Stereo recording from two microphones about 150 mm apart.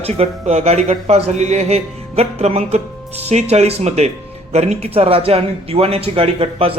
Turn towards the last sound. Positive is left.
turn(degrees=-40)  # may be behind; listen again after turning